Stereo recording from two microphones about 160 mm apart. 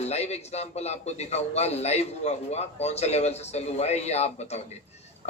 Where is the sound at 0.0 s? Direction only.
40° left (ahead or behind).